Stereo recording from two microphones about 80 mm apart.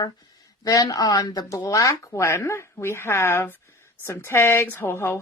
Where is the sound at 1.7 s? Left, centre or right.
Left.